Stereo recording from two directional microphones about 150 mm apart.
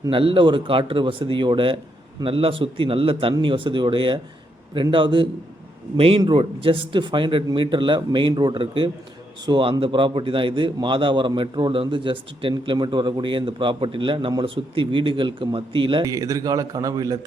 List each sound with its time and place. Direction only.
0.1 s a man's voice: 35° right (ahead or behind)
16.0 s a man's voice: 20° right (ahead or behind)